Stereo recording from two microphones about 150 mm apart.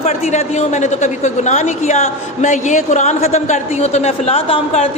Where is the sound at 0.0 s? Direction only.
50° left (ahead or behind).